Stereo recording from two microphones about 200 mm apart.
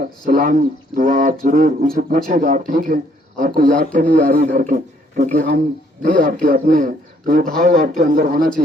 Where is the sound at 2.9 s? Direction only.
40° right (ahead or behind).